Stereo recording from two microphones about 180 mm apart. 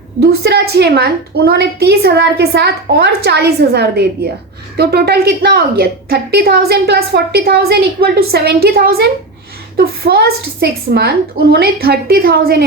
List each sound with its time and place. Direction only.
0.2 s a woman's voice: 65° right (ahead or behind)